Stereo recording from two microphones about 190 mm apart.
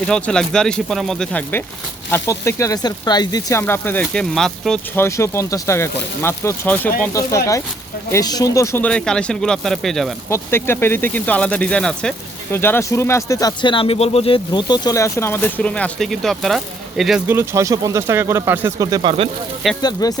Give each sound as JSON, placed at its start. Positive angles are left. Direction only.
{"t": 0.1, "sound": "speech", "side_deg": 5}
{"t": 5.0, "sound": "speech", "side_deg": 15}
{"t": 10.2, "sound": "speech", "side_deg": 15}
{"t": 19.8, "sound": "speech", "side_deg": 20}